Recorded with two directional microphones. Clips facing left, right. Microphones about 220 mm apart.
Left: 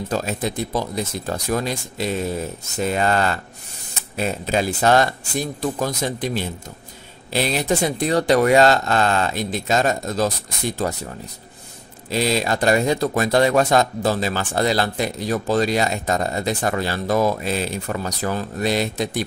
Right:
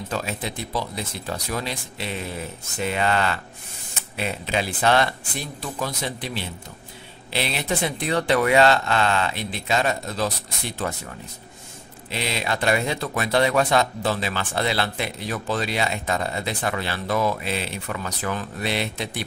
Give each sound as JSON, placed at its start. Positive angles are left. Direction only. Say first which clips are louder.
{"t": 0.1, "sound": "speech", "louder": "left 5 dB", "side_deg": 40}
{"t": 12.1, "sound": "speech", "louder": "left 7 dB", "side_deg": 40}